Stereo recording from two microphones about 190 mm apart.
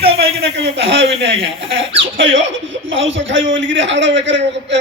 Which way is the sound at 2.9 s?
80° right.